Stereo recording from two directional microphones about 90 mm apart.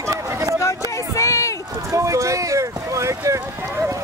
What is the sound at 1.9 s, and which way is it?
Boat, 35° right (ahead or behind).